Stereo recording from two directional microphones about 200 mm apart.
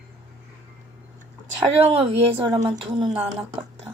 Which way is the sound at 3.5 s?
30° right (ahead or behind).